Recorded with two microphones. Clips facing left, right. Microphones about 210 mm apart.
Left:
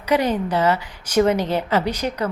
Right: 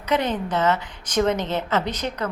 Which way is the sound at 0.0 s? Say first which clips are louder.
Left 4 dB; 10° left (ahead or behind).